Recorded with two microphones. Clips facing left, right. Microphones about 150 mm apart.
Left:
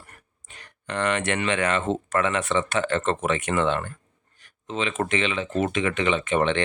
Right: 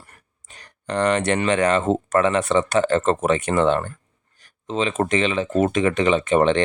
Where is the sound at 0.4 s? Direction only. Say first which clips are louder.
Right 5 dB; 35° right (ahead or behind).